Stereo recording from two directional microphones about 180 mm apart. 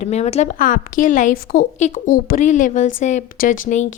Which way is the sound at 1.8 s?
40° left (ahead or behind).